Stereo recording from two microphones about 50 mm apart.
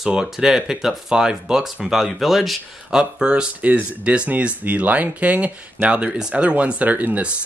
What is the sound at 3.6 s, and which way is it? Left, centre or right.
Speech, right.